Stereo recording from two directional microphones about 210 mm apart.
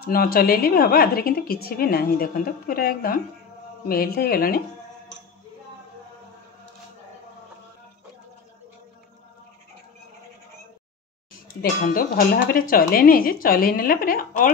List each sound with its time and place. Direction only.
0.0 s a woman's voice: 45° left (ahead or behind)
11.6 s a woman's voice: 45° left (ahead or behind)